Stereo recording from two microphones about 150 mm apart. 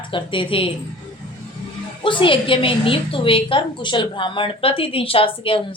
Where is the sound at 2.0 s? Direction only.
35° left (ahead or behind).